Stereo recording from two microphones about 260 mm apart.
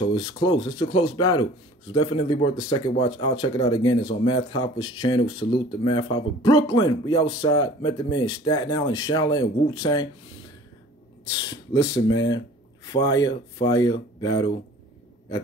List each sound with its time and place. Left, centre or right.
0.1 s speech: centre
11.2 s speech: centre